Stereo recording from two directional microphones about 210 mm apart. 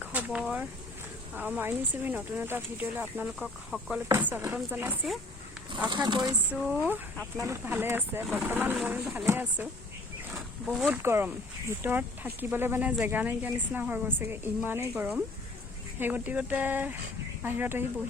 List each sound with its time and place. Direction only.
0.0 s a sound: 5° right (ahead or behind)
1.4 s speech: 10° right (ahead or behind)
5.7 s speech: 20° right (ahead or behind)
6.5 s speech: 5° right (ahead or behind)